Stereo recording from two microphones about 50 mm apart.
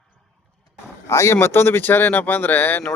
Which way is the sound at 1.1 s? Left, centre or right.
Left.